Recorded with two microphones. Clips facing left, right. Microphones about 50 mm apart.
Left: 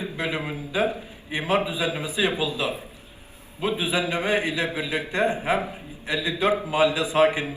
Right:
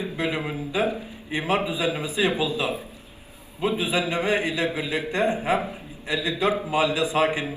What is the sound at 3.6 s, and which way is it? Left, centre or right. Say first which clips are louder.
A man's voice: right 1 dB; left.